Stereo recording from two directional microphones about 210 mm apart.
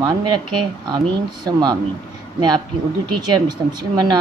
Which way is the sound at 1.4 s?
20° right (ahead or behind).